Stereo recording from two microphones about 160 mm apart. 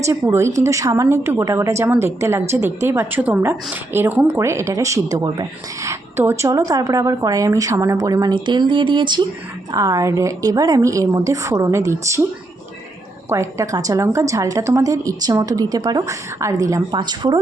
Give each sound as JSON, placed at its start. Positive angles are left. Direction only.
{"t": 0.0, "sound": "a woman's voice", "side_deg": -15}
{"t": 13.3, "sound": "a woman's voice", "side_deg": -20}